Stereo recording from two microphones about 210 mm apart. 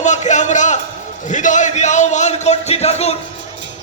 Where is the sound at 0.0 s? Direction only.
35° left (ahead or behind).